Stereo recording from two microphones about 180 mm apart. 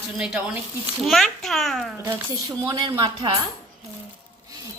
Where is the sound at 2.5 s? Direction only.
25° right (ahead or behind).